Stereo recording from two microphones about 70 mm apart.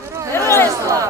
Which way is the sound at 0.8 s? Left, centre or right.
Right.